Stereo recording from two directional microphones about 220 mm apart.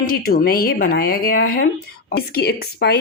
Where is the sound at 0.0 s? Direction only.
40° left (ahead or behind).